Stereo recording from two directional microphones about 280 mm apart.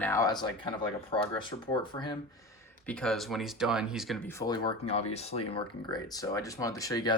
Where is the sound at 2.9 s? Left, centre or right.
Centre.